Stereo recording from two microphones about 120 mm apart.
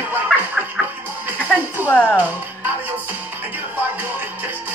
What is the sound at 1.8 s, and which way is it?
Speech, 15° left (ahead or behind).